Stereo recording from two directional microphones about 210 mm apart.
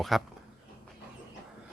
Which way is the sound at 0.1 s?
Centre (ahead or behind).